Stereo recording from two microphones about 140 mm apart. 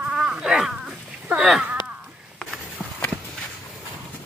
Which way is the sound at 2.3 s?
10° left (ahead or behind).